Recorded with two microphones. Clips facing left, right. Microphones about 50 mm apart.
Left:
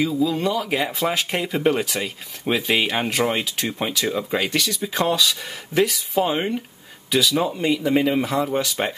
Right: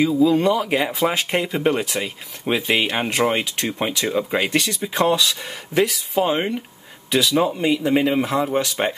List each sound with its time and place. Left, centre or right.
0.4 s speech: right
0.7 s speech: centre